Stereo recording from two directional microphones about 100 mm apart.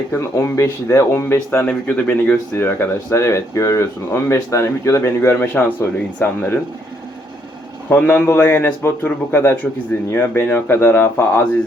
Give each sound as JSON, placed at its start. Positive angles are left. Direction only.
{"t": 0.1, "sound": "speech", "side_deg": 30}
{"t": 1.6, "sound": "speech", "side_deg": 15}
{"t": 2.6, "sound": "speech", "side_deg": 25}
{"t": 7.9, "sound": "speech", "side_deg": 15}